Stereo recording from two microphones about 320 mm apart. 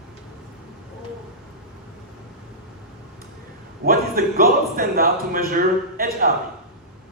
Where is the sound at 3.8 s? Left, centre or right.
Right.